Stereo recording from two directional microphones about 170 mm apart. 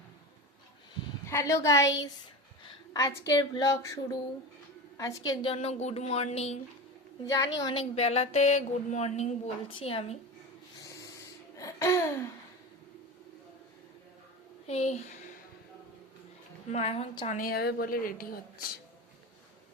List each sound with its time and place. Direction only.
1.3 s a woman's voice: 15° left (ahead or behind)
5.5 s speech: 40° left (ahead or behind)
7.3 s speech: 20° left (ahead or behind); by 10.2 s 35° left (ahead or behind)
10.8 s rub: 20° left (ahead or behind)
11.5 s a sound: 20° left (ahead or behind)
14.7 s speech: 40° left (ahead or behind)
16.7 s speech: 35° left (ahead or behind)
17.3 s a woman's voice: 60° left (ahead or behind)